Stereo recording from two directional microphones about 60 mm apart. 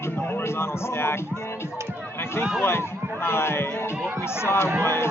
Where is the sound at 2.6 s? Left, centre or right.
Left.